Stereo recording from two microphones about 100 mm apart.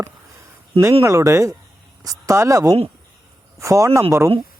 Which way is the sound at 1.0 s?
30° right (ahead or behind).